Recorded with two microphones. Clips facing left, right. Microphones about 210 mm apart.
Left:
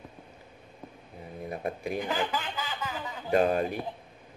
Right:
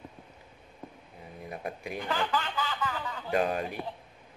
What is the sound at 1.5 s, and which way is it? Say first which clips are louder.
Speech: left 4 dB; 40° left (ahead or behind).